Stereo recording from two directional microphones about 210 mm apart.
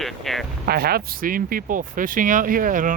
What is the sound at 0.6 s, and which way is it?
Speech, 45° right (ahead or behind).